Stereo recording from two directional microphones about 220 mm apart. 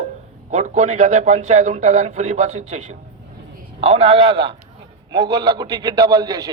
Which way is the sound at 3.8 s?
25° right (ahead or behind).